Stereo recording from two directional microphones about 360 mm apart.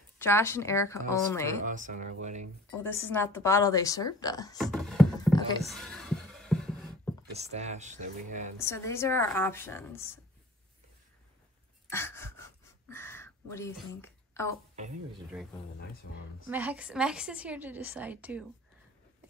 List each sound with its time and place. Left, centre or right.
0.2 s a woman's voice: centre
1.6 s speech: right
2.7 s a woman's voice: centre
5.7 s a sound: centre
6.9 s speech: centre
8.5 s a woman's voice: centre
11.9 s gasp: centre
16.4 s a woman's voice: centre